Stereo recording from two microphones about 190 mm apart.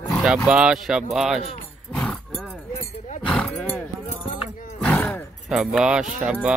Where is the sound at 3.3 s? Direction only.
10° left (ahead or behind).